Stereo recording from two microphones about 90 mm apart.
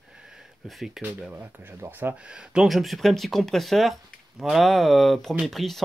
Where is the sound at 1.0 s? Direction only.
15° right (ahead or behind).